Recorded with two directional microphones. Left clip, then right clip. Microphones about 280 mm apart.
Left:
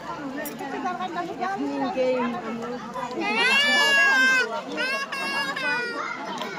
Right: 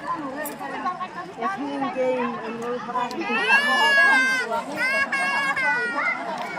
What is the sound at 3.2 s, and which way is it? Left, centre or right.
Speech, left.